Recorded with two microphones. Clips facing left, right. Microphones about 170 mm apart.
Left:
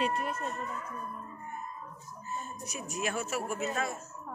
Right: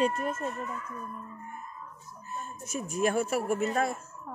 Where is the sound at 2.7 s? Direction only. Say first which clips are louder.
Right 8 dB; 50° right (ahead or behind).